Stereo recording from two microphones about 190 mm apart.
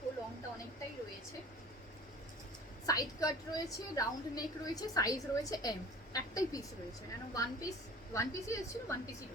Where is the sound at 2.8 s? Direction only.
20° left (ahead or behind).